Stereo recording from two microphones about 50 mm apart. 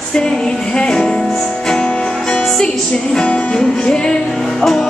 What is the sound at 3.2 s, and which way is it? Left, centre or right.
Music, left.